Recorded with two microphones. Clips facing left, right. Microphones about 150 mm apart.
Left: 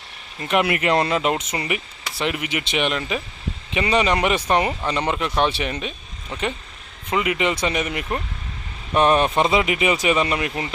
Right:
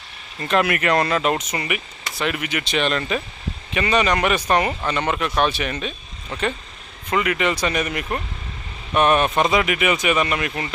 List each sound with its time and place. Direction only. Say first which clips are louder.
0.3 s speech: even; 15° left (ahead or behind)
3.7 s speech: even; 25° left (ahead or behind)
7.1 s speech: even; 20° left (ahead or behind)